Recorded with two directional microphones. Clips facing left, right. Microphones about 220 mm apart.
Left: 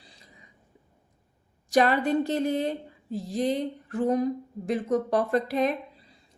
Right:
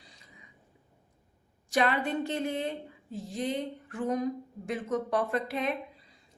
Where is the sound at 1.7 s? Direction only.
40° left (ahead or behind).